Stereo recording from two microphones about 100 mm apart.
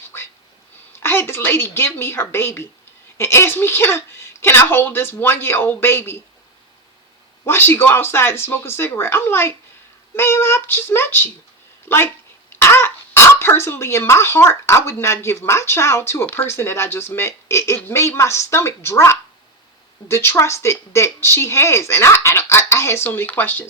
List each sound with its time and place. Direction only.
0.1 s a sound: 25° left (ahead or behind)
0.9 s a woman's voice: 25° left (ahead or behind)
7.4 s speech: 25° left (ahead or behind)